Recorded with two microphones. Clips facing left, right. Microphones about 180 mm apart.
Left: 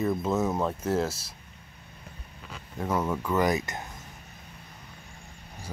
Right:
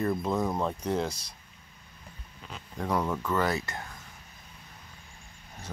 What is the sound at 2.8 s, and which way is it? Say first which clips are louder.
Speech: left 1 dB; 5° left (ahead or behind).